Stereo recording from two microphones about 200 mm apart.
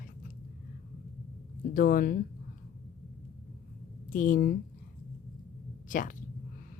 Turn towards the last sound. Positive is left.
turn(degrees=40)  # may be behind; listen again after turning